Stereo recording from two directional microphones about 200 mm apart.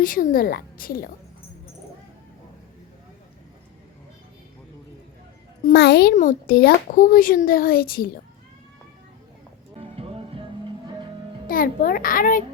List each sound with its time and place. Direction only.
0.0 s a child's voice: 45° left (ahead or behind)
5.6 s a child's voice: 55° left (ahead or behind)
9.7 s music: 30° right (ahead or behind)
11.4 s a child's voice: 45° left (ahead or behind)